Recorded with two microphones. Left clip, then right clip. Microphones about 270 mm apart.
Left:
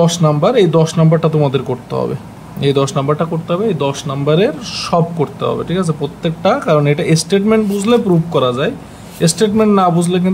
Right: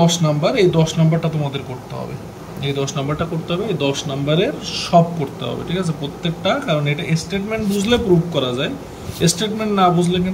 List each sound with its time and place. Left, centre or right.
0.0 s speech: centre
2.6 s speech: left